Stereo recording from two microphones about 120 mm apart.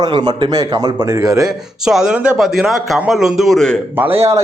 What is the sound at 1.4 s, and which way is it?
A man's voice, 5° right (ahead or behind).